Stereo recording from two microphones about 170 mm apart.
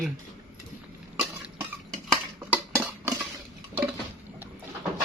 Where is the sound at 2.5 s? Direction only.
10° right (ahead or behind).